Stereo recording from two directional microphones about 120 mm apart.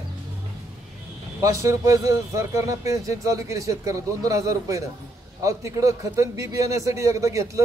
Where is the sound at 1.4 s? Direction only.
25° right (ahead or behind).